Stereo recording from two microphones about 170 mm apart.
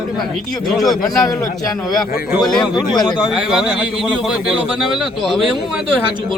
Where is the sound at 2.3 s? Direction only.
Centre (ahead or behind).